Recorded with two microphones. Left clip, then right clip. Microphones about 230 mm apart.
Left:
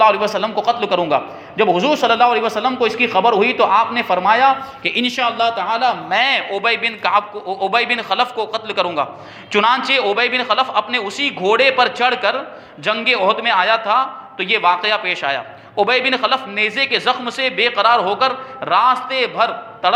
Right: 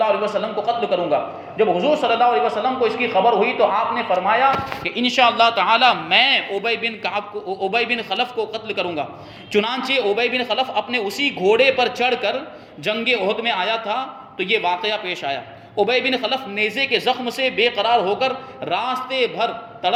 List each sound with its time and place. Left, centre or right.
0.0 s a man's voice: left
5.2 s a man's voice: centre